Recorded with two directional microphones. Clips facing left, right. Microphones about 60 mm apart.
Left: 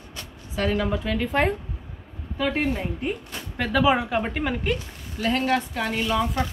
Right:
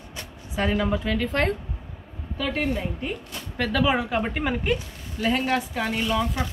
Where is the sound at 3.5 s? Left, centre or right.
Centre.